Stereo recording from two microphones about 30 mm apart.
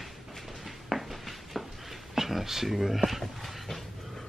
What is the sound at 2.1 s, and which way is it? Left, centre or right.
Speech, centre.